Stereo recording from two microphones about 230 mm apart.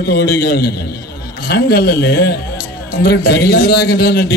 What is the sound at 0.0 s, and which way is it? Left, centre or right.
A man's voice, left.